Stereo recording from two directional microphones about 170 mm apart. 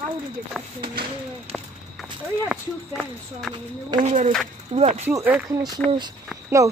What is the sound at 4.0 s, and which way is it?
Speech, 45° right (ahead or behind).